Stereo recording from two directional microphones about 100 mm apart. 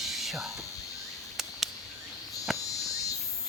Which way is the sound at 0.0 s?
Centre (ahead or behind).